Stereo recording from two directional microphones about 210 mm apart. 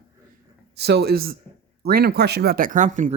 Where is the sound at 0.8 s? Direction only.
50° right (ahead or behind).